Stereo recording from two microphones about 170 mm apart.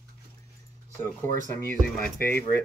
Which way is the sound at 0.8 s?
45° right (ahead or behind).